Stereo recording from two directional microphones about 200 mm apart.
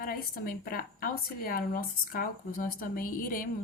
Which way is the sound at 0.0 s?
45° left (ahead or behind).